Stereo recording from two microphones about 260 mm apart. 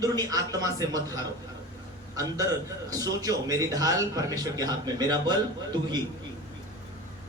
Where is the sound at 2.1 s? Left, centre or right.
Centre.